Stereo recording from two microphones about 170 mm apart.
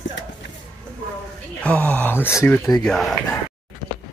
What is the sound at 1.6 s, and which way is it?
Speech, 10° left (ahead or behind).